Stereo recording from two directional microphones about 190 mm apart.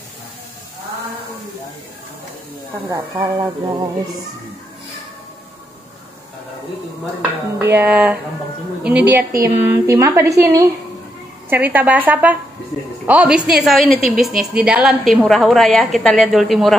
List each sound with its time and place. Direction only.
2.9 s speech: 25° right (ahead or behind)
7.2 s a woman's voice: 10° right (ahead or behind)